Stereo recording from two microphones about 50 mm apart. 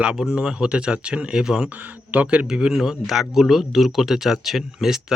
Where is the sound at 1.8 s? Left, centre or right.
Right.